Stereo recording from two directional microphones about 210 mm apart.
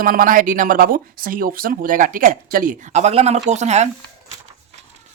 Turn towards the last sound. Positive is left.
turn(degrees=-35)  # may be behind; listen again after turning